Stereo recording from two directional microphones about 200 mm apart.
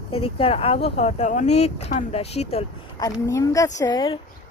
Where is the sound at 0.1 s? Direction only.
30° left (ahead or behind).